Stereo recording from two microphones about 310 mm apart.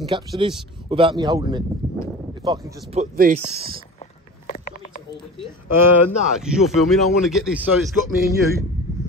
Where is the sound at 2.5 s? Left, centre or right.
Centre.